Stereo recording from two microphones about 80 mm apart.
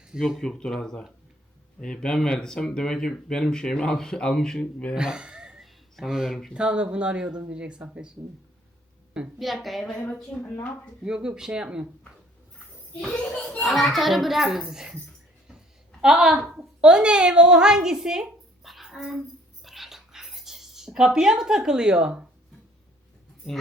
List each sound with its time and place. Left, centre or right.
0.2 s speech: centre
4.9 s speech: centre
6.5 s speech: centre
9.4 s a child's voice: centre
11.0 s speech: centre
13.1 s a child's voice: centre
16.0 s a woman's voice: centre
19.6 s a sound: centre